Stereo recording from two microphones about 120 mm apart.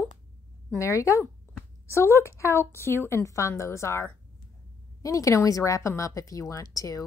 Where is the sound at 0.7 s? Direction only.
25° left (ahead or behind).